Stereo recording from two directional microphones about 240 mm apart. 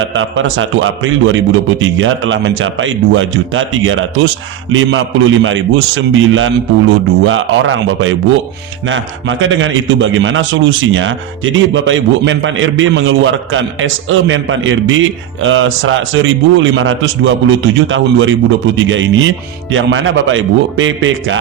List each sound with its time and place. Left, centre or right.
0.1 s a man's voice: right